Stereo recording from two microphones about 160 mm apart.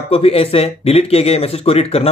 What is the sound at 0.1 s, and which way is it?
Speech, 35° left (ahead or behind).